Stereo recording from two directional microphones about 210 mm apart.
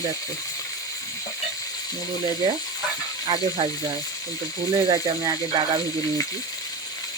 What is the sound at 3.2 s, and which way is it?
Speech, 20° right (ahead or behind).